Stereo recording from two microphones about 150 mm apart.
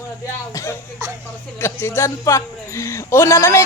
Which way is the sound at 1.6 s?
15° left (ahead or behind).